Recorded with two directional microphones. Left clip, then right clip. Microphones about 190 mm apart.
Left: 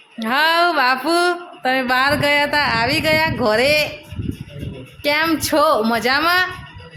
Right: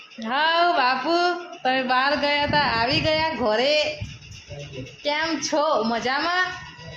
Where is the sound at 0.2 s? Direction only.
25° left (ahead or behind).